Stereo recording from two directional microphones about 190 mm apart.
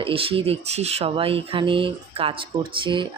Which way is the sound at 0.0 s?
30° right (ahead or behind).